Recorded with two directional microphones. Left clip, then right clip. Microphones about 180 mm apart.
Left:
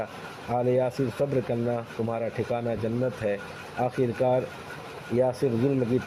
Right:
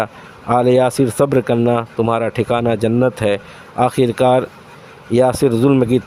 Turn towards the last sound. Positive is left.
turn(degrees=-45)  # may be behind; listen again after turning